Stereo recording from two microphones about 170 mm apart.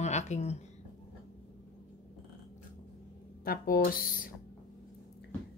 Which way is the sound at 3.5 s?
60° left (ahead or behind).